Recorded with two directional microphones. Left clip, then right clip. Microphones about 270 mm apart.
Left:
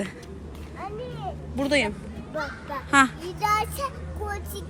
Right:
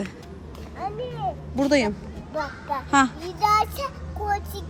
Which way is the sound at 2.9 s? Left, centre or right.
Centre.